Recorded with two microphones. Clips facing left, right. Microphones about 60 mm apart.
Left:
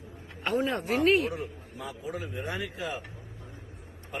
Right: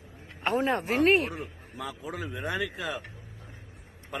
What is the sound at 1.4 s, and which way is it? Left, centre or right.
A man's voice, right.